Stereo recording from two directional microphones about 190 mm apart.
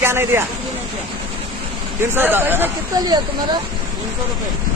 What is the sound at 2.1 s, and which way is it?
Speech, 10° right (ahead or behind).